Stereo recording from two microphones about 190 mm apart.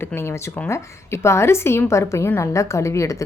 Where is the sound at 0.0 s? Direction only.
15° left (ahead or behind).